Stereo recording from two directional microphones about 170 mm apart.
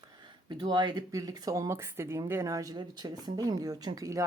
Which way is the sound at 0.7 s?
25° right (ahead or behind).